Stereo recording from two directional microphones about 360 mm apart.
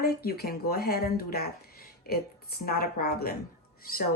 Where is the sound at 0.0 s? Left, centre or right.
Left.